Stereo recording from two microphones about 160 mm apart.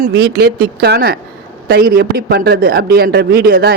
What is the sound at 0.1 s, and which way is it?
A man's voice, 80° right.